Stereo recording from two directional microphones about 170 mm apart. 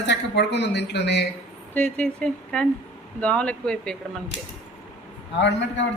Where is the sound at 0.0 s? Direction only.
90° left.